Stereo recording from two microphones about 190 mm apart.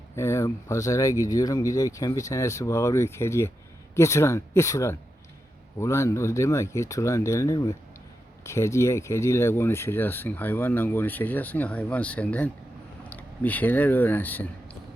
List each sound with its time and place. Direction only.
0.2 s speech: 15° left (ahead or behind)